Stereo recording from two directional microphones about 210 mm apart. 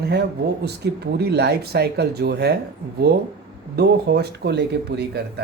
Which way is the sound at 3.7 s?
50° right (ahead or behind).